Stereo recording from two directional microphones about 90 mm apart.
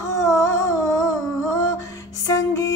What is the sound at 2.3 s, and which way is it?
Music, 40° left (ahead or behind).